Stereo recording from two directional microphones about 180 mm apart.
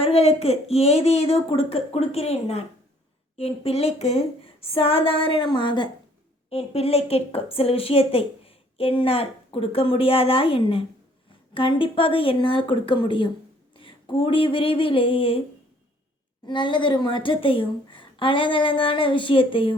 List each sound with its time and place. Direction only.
0.0 s a woman's voice: 35° left (ahead or behind)
16.5 s a woman's voice: 25° left (ahead or behind)